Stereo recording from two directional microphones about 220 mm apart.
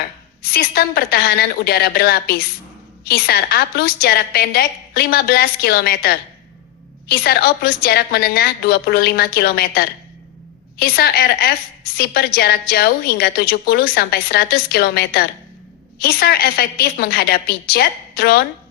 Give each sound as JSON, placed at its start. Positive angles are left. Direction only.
{"t": 0.4, "sound": "a woman's voice", "side_deg": 45}